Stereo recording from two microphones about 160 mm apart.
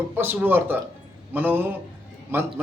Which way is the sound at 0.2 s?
15° right (ahead or behind).